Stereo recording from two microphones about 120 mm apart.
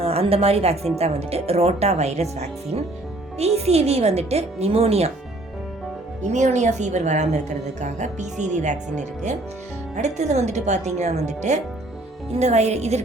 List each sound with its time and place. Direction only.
0.0 s a woman's voice: 55° right (ahead or behind)
6.3 s speech: 75° right (ahead or behind)